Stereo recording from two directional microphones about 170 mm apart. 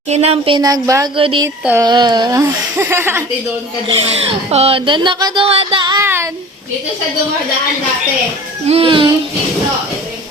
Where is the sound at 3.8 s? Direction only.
35° right (ahead or behind).